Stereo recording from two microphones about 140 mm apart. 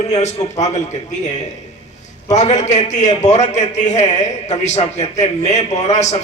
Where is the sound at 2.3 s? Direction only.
55° left (ahead or behind).